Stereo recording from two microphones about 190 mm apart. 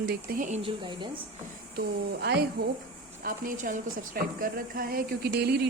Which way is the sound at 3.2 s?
45° right (ahead or behind).